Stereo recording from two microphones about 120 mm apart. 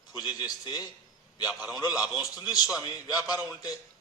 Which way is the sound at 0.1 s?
35° left (ahead or behind).